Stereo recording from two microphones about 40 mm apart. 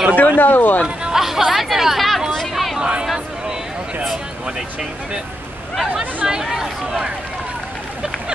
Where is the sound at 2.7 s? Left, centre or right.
Right.